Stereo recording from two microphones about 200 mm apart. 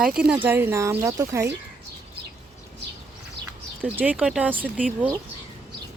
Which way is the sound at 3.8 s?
10° right (ahead or behind).